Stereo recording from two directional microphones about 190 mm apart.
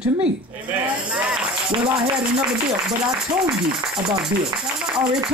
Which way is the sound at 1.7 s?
25° right (ahead or behind).